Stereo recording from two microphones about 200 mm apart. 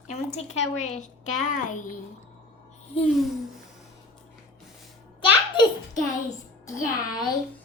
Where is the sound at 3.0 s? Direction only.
Centre (ahead or behind).